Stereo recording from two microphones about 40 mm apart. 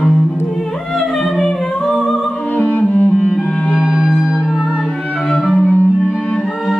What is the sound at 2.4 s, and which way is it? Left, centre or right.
Music, left.